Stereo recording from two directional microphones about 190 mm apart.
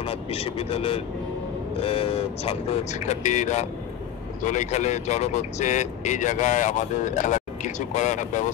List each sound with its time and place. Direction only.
0.0 s speech: 30° left (ahead or behind)